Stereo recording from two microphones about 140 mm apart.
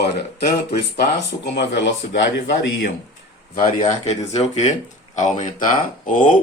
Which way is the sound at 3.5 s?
75° left (ahead or behind).